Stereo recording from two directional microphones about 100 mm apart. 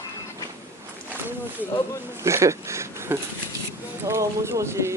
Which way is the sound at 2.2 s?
30° right (ahead or behind).